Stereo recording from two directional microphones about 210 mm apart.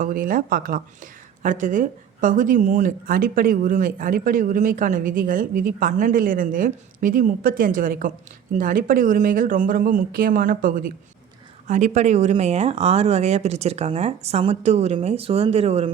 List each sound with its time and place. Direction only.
0.0 s speech: 40° right (ahead or behind)